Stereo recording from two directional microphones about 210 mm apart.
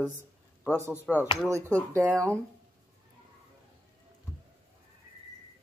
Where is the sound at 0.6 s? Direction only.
15° right (ahead or behind).